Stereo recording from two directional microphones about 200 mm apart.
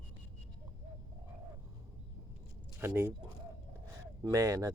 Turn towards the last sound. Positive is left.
turn(degrees=-15)  # may be behind; listen again after turning